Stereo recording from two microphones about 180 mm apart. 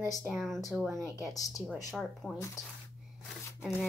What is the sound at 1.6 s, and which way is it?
Speech, centre (ahead or behind).